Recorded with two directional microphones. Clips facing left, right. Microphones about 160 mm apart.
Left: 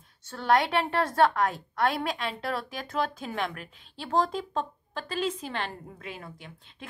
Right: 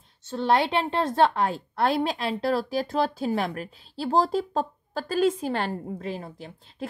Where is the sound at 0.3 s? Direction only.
25° right (ahead or behind).